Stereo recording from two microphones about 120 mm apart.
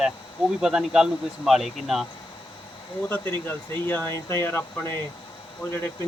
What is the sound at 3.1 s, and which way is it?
Speech, 15° left (ahead or behind).